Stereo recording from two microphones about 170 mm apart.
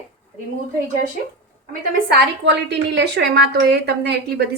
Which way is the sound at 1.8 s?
70° right (ahead or behind).